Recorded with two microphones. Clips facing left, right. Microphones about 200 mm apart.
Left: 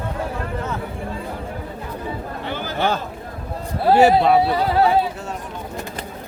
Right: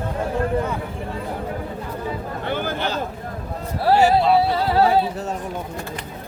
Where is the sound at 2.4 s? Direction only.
50° right (ahead or behind).